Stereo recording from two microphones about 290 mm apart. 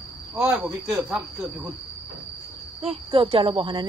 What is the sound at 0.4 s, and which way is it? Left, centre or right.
Speech, centre.